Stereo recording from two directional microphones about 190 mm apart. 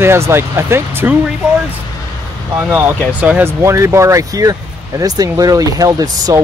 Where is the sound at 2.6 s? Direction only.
10° right (ahead or behind).